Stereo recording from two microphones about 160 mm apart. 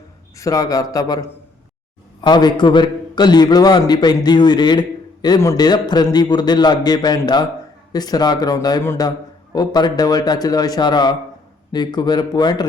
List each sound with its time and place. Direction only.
0.3 s a man's voice: 20° left (ahead or behind)
2.2 s a man's voice: 25° left (ahead or behind)